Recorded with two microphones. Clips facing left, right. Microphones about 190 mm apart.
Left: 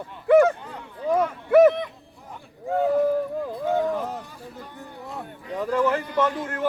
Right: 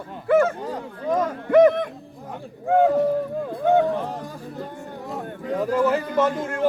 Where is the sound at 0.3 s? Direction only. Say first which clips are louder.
Left 2 dB; 15° left (ahead or behind).